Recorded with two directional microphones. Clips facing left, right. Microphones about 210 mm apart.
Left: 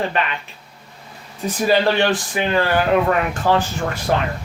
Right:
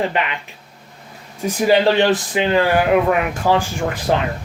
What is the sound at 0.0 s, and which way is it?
Speech, 15° right (ahead or behind).